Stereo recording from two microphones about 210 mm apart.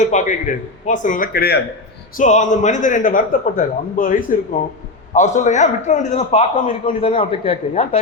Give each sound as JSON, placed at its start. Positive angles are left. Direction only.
{"t": 0.0, "sound": "a man's voice", "side_deg": 35}
{"t": 2.1, "sound": "a man's voice", "side_deg": 35}